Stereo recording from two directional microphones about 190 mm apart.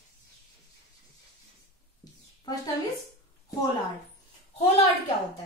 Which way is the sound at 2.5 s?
20° left (ahead or behind).